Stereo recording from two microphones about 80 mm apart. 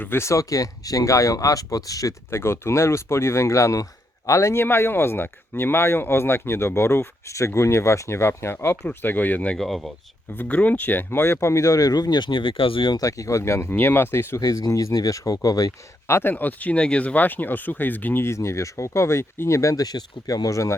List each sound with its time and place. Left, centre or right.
0.0 s speech: left
2.3 s speech: left
4.6 s speech: left
9.6 s speech: centre
10.3 s speech: centre; by 13.0 s left
13.0 s speech: left
13.7 s speech: left
14.4 s speech: left
16.0 s speech: left
16.3 s speech: left
19.8 s speech: left